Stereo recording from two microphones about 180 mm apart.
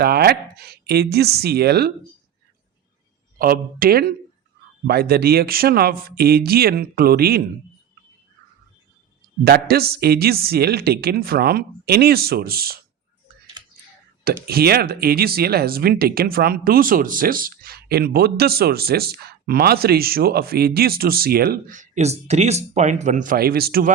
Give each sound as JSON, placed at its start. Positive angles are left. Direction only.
{"t": 0.0, "sound": "speech", "side_deg": -60}
{"t": 3.3, "sound": "speech", "side_deg": -55}
{"t": 9.4, "sound": "speech", "side_deg": -60}
{"t": 14.4, "sound": "speech", "side_deg": -60}